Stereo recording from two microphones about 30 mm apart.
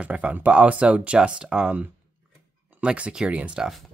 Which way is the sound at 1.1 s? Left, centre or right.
Right.